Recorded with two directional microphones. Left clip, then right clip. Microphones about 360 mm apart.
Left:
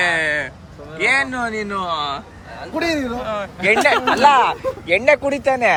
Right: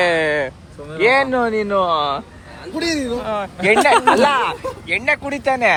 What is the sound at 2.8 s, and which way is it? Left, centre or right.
Speech, centre.